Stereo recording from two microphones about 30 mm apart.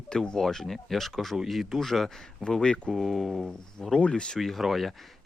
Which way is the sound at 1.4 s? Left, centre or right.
Centre.